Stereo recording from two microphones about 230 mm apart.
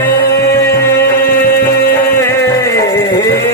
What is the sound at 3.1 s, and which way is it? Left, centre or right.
Music, left.